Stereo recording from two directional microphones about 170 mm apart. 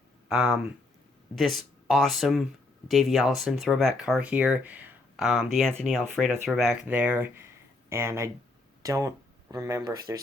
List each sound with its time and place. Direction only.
0.3 s speech: centre (ahead or behind); by 10.2 s 20° right (ahead or behind)